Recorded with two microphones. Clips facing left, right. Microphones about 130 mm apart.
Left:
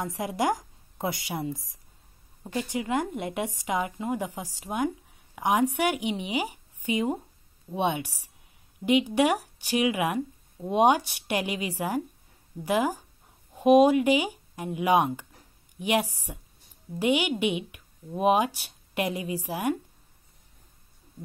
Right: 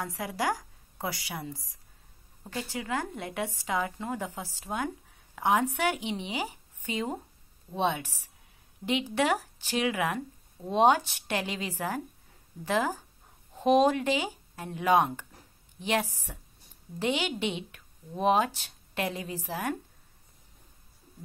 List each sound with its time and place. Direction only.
0.0 s a woman's voice: 20° left (ahead or behind)